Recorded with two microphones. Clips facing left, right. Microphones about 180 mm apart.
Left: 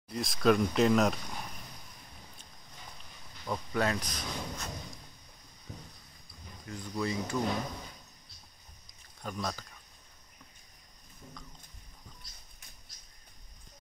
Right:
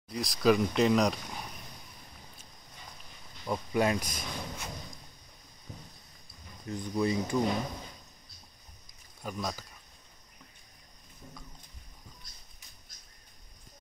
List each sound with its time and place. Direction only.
0.1 s speech: centre (ahead or behind)
3.4 s speech: 15° right (ahead or behind)
6.7 s speech: 20° right (ahead or behind)
9.2 s speech: 5° right (ahead or behind)